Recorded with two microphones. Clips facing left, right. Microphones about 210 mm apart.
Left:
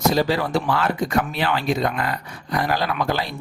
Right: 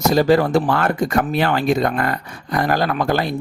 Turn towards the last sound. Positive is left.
turn(degrees=-50)  # may be behind; listen again after turning